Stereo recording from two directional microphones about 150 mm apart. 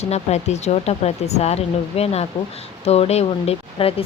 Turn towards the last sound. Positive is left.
turn(degrees=40)  # may be behind; listen again after turning